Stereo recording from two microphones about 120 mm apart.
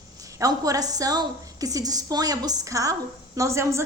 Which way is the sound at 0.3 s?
30° right (ahead or behind).